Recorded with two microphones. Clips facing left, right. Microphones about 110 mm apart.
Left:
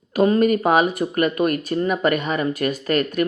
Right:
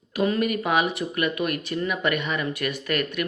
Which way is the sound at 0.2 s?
40° left (ahead or behind).